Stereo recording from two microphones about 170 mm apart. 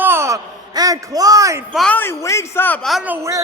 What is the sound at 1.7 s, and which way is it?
A man's voice, 5° left (ahead or behind).